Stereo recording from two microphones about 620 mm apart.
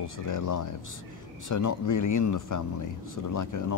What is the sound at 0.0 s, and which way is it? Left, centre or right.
Speech, left.